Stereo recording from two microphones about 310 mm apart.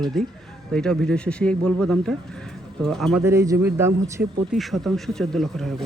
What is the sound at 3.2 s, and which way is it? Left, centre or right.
A man's voice, centre.